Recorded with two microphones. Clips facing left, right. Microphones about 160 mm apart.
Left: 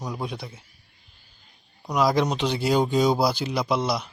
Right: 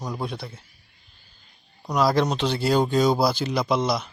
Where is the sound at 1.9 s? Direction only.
15° left (ahead or behind).